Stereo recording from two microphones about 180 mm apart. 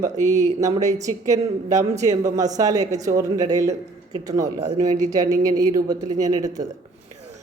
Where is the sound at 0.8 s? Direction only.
40° right (ahead or behind).